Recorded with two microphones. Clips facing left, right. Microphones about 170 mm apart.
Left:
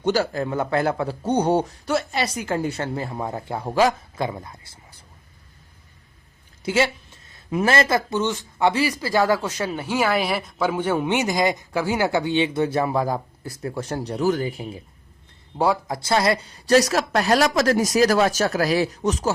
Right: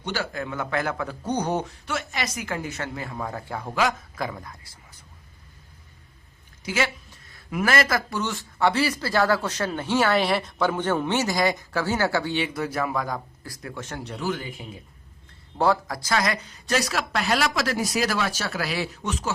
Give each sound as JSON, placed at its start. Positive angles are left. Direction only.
{"t": 0.0, "sound": "a man's voice", "side_deg": 40}
{"t": 6.7, "sound": "speech", "side_deg": 30}
{"t": 15.5, "sound": "a man's voice", "side_deg": 10}
{"t": 15.9, "sound": "a man's voice", "side_deg": 30}